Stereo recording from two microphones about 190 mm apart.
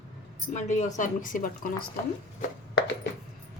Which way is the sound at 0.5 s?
40° left (ahead or behind).